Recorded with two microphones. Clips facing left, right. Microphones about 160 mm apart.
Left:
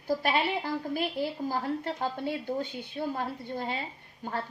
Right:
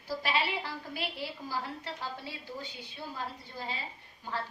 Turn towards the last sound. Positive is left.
turn(degrees=55)  # may be behind; listen again after turning